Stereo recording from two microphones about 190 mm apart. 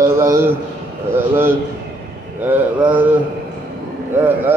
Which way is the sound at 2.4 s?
10° right (ahead or behind).